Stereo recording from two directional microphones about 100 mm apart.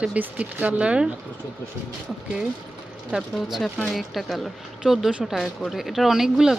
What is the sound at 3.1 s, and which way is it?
Speech, 10° right (ahead or behind).